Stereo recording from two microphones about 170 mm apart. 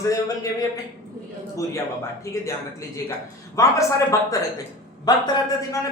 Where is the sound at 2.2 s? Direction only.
15° left (ahead or behind).